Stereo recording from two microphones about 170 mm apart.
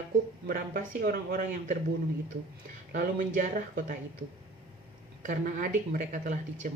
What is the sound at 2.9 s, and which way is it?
Speech, 50° right (ahead or behind).